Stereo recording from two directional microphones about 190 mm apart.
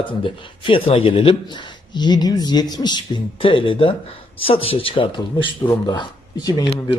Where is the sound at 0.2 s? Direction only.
25° left (ahead or behind).